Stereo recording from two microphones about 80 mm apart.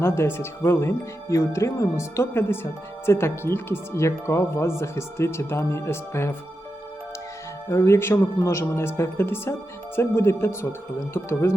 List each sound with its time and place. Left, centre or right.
0.0 s speech: left
7.7 s speech: left